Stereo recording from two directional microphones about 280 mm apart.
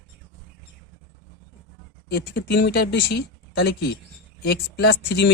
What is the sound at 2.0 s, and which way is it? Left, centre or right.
Speech, left.